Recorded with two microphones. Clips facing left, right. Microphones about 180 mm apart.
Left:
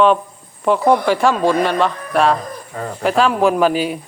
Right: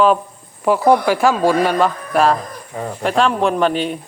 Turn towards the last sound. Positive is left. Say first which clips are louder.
# left 2 dB
turn(degrees=5)  # may be behind; listen again after turning